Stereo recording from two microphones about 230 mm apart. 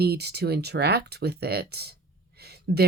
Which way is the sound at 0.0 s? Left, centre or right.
Right.